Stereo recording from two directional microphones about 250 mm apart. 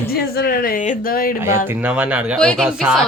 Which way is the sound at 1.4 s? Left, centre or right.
Centre.